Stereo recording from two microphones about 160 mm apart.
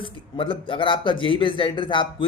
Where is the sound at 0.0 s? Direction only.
35° left (ahead or behind).